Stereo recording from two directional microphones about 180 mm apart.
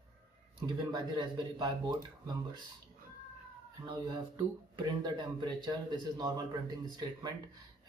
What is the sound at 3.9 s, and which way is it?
Speech, 25° right (ahead or behind).